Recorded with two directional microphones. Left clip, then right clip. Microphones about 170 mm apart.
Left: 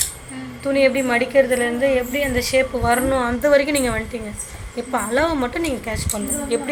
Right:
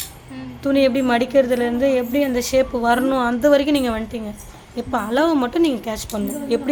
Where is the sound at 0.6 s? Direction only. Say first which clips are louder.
Even; 70° right (ahead or behind).